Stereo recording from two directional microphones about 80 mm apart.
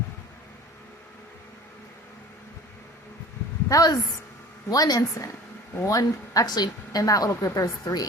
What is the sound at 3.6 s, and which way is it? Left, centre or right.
A woman's voice, left.